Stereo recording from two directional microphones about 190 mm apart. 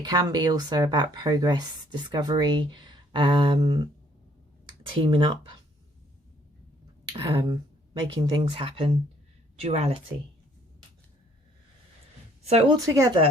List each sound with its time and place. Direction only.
0.0 s speech: 20° right (ahead or behind)
4.9 s speech: 25° right (ahead or behind)
7.1 s a woman's voice: 20° right (ahead or behind)
12.5 s a woman's voice: 30° right (ahead or behind)
12.8 s speech: 15° right (ahead or behind)